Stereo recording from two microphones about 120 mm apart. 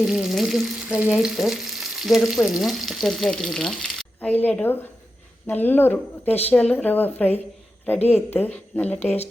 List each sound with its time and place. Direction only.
0.0 s frying: 5° right (ahead or behind)
4.4 s speech: 15° left (ahead or behind)